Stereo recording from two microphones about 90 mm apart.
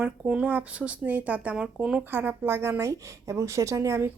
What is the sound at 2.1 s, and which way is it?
Speech, 25° right (ahead or behind).